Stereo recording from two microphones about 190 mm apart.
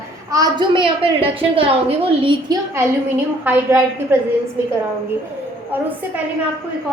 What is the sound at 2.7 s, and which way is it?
A woman's voice, 10° right (ahead or behind).